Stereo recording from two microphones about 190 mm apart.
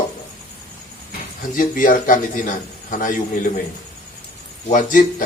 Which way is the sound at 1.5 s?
45° left (ahead or behind).